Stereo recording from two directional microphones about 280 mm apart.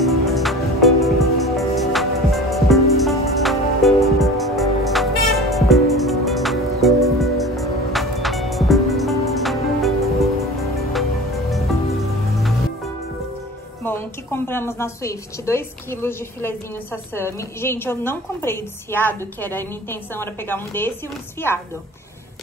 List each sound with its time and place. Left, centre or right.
0.0 s music: centre
13.8 s a woman's voice: centre